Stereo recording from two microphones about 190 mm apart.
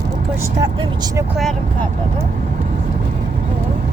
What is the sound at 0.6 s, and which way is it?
Vehicle, 20° right (ahead or behind).